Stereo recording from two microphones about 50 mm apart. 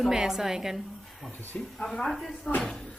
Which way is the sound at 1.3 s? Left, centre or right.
Left.